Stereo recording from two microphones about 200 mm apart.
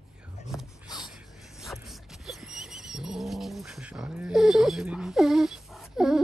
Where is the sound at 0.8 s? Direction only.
20° left (ahead or behind).